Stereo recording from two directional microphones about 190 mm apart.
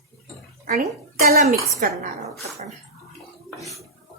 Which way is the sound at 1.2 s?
50° right (ahead or behind).